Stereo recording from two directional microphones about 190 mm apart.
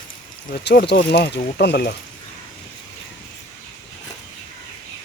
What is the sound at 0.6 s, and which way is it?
Speech, 60° left (ahead or behind).